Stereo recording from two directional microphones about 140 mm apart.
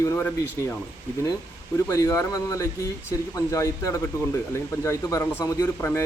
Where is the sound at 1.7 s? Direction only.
20° left (ahead or behind).